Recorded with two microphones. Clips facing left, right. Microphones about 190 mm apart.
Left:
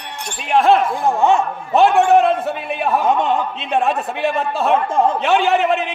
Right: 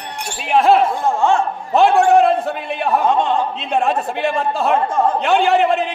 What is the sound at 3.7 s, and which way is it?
A man's voice, centre (ahead or behind).